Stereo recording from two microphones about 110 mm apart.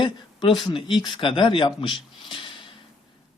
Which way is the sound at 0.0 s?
45° left (ahead or behind).